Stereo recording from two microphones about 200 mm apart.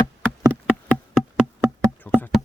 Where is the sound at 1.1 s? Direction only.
Centre (ahead or behind).